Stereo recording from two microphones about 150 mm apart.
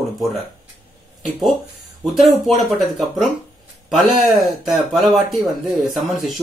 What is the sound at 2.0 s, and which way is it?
Speech, centre (ahead or behind).